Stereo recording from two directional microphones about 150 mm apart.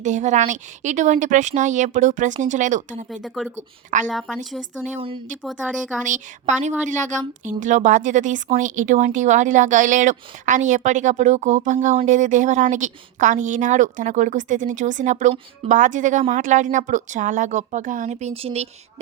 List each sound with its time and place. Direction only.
0.0 s a woman's voice: 50° right (ahead or behind)
3.1 s speech: 5° right (ahead or behind)
4.9 s speech: 35° right (ahead or behind)
5.4 s speech: 5° right (ahead or behind)
6.0 s a woman's voice: 55° right (ahead or behind)